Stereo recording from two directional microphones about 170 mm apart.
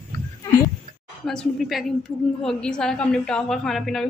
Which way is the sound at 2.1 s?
25° left (ahead or behind).